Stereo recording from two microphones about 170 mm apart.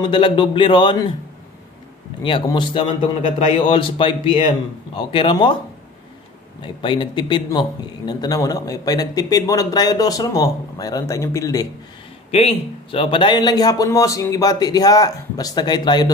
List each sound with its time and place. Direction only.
0.0 s speech: 30° left (ahead or behind)
2.2 s a man's voice: 30° left (ahead or behind)
6.6 s speech: 30° left (ahead or behind)
12.3 s speech: 35° left (ahead or behind)